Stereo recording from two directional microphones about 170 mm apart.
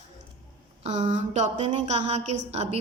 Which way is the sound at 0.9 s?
40° right (ahead or behind).